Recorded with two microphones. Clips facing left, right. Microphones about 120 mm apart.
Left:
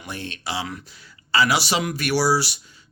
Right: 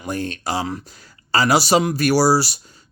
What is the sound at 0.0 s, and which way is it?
Speech, 45° right (ahead or behind).